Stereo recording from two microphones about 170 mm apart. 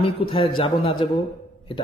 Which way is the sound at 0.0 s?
30° left (ahead or behind).